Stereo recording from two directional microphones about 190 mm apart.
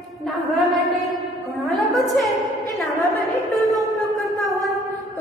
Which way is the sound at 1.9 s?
Centre (ahead or behind).